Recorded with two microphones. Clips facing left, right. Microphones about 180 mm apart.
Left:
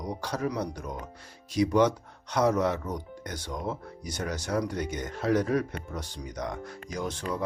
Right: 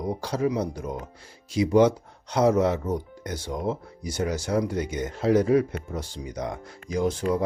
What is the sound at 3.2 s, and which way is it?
Speech, 10° right (ahead or behind).